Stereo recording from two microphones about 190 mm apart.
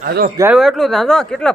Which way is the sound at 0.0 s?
50° right (ahead or behind).